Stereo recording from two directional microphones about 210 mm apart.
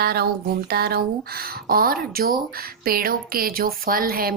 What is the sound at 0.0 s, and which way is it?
Speech, 50° right (ahead or behind).